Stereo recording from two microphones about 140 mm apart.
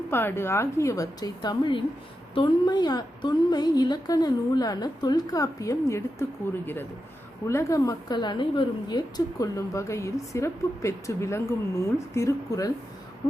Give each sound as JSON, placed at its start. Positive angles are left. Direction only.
{"t": 0.1, "sound": "a woman's voice", "side_deg": 15}
{"t": 7.4, "sound": "a woman's voice", "side_deg": 20}